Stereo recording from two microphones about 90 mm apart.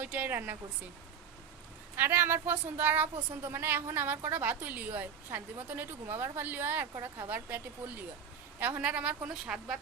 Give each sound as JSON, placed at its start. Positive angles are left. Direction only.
{"t": 0.0, "sound": "a woman's voice", "side_deg": -20}
{"t": 2.0, "sound": "a woman's voice", "side_deg": -25}
{"t": 9.3, "sound": "speech", "side_deg": -5}